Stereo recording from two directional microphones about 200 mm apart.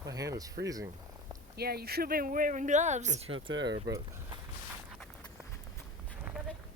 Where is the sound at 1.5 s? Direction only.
50° right (ahead or behind); by 3.3 s 35° right (ahead or behind).